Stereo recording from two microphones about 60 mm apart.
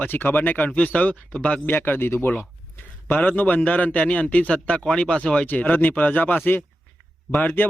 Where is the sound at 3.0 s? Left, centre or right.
Left.